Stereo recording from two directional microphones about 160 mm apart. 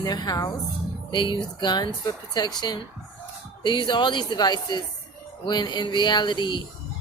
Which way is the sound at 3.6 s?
30° left (ahead or behind).